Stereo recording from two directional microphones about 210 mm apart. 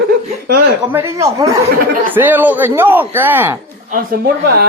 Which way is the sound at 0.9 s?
10° right (ahead or behind).